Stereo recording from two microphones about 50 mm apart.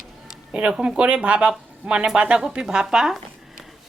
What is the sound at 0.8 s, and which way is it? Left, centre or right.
A woman's voice, right.